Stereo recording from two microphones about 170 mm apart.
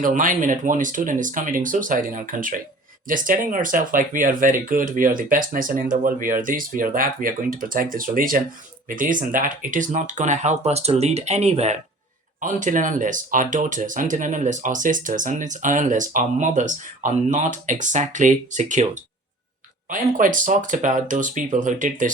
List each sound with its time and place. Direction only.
0.0 s speech: 50° right (ahead or behind)